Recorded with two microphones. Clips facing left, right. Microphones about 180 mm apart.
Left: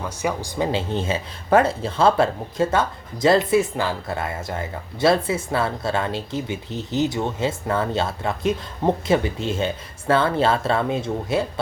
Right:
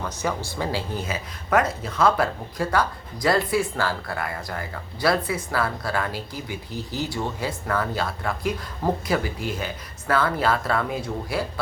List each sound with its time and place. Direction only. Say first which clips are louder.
0.0 s speech: left 2 dB; 10° left (ahead or behind)